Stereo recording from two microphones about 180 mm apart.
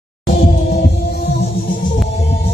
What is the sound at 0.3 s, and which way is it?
Music, 55° left (ahead or behind).